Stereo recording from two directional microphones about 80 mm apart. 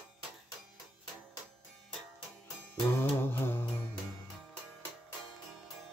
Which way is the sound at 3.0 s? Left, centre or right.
Left.